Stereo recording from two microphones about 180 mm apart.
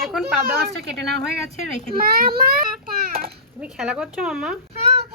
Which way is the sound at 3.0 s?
55° right (ahead or behind).